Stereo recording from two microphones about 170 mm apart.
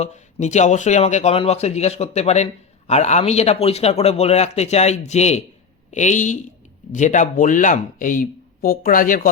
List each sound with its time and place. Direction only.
0.0 s speech: 45° left (ahead or behind)